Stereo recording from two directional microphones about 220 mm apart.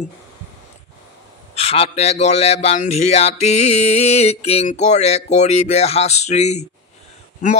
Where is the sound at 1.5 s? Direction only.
25° left (ahead or behind).